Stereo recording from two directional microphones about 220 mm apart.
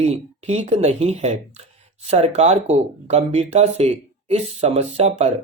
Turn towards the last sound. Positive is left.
turn(degrees=-30)  # may be behind; listen again after turning